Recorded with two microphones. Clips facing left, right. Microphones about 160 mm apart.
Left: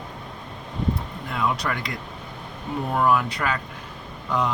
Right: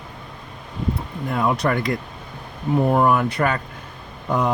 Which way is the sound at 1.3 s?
45° right (ahead or behind).